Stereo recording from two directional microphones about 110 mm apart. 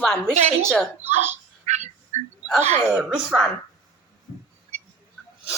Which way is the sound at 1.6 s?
90° right.